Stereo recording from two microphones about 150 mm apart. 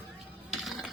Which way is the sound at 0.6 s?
Centre (ahead or behind).